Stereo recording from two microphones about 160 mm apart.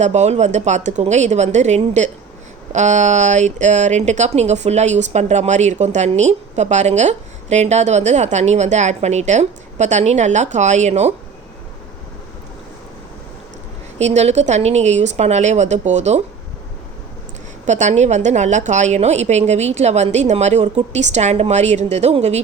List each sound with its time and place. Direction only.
0.0 s speech: 45° right (ahead or behind)
14.0 s speech: 45° right (ahead or behind)
17.7 s speech: 50° right (ahead or behind)